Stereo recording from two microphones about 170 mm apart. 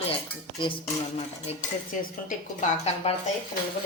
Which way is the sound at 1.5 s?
35° left (ahead or behind).